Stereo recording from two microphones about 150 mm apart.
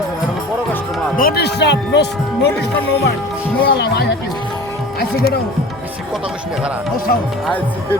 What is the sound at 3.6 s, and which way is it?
Speech, 90° left.